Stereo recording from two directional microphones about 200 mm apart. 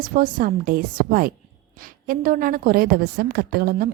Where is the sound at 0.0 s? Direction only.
45° right (ahead or behind).